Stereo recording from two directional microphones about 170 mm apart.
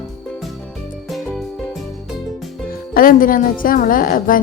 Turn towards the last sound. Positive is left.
turn(degrees=55)  # may be behind; listen again after turning